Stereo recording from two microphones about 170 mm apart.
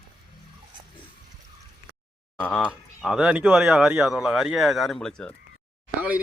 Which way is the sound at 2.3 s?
5° left (ahead or behind).